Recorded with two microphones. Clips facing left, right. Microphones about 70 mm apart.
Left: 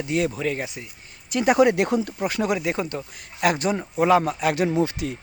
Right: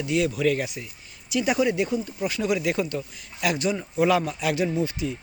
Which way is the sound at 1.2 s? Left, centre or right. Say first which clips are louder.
Left 5 dB; left.